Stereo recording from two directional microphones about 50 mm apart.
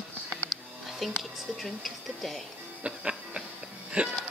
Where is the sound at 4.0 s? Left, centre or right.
Centre.